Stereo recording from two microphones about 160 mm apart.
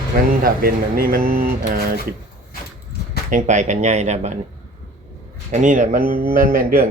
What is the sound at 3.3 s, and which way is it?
Speech, 50° right (ahead or behind).